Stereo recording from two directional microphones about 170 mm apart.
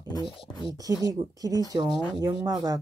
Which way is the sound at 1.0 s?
20° right (ahead or behind).